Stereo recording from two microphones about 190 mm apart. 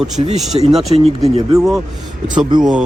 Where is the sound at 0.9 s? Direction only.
25° right (ahead or behind).